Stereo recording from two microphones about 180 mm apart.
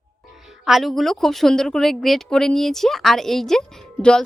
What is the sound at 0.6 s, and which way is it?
Speech, centre (ahead or behind).